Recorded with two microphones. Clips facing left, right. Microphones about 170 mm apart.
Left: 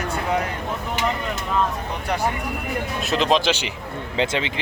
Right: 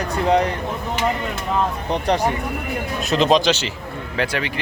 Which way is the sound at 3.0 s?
Centre (ahead or behind).